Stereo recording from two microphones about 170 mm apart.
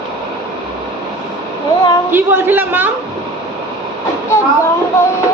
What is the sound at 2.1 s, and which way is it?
Speech, 15° right (ahead or behind).